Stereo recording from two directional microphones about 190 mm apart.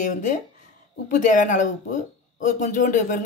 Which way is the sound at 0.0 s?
45° left (ahead or behind).